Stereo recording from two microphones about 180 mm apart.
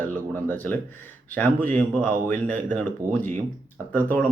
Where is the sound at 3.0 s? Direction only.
50° right (ahead or behind).